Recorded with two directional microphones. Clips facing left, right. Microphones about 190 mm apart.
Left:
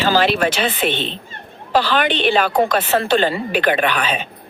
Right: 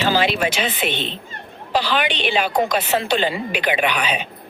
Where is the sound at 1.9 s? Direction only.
50° left (ahead or behind).